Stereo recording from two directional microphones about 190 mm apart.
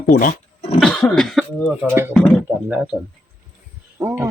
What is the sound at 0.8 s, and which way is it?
Cough, centre (ahead or behind).